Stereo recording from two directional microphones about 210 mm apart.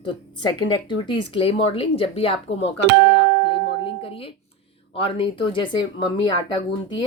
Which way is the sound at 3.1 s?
25° left (ahead or behind).